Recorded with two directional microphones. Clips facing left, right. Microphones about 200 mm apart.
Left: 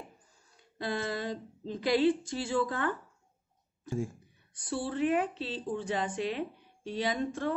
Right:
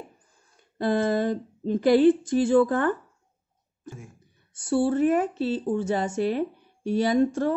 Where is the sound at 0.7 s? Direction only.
55° right (ahead or behind).